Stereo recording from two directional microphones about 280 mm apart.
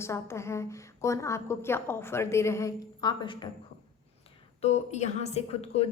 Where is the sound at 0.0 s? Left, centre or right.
Centre.